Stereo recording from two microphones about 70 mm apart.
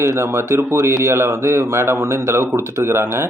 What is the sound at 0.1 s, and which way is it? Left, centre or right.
Speech, right.